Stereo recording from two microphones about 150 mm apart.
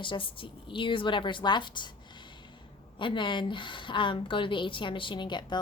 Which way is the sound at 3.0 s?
30° left (ahead or behind).